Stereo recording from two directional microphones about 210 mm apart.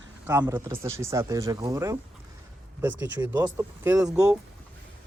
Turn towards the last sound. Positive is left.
turn(degrees=-5)  # may be behind; listen again after turning